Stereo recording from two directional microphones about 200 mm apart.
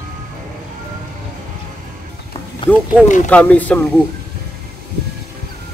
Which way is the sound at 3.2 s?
5° left (ahead or behind).